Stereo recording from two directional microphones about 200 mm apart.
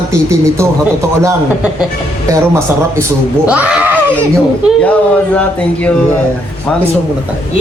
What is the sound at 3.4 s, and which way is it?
Speech, 5° right (ahead or behind).